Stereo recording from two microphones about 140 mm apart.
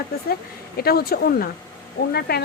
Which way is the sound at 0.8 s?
90° left.